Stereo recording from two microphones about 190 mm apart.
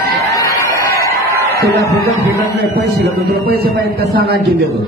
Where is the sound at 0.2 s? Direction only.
15° left (ahead or behind).